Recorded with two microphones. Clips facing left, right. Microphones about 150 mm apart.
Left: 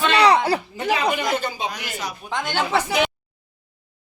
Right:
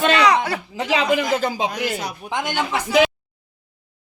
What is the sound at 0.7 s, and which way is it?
Speech, 90° right.